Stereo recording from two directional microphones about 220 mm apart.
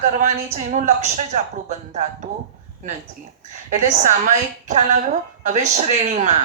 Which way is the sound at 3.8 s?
35° right (ahead or behind).